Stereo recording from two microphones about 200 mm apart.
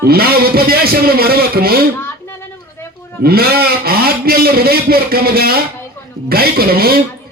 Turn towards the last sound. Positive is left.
turn(degrees=-50)  # may be behind; listen again after turning